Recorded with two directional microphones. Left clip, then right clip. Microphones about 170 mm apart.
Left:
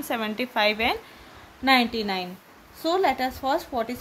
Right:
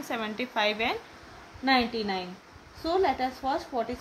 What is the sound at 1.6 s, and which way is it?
A woman's voice, 45° left (ahead or behind).